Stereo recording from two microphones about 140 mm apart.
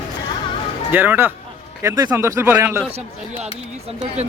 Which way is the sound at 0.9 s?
15° right (ahead or behind).